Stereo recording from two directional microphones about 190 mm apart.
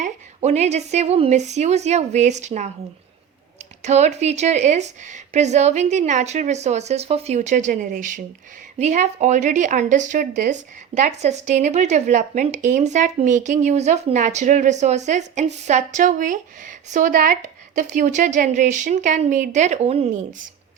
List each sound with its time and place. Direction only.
0.0 s speech: 35° right (ahead or behind)
3.8 s speech: 35° right (ahead or behind)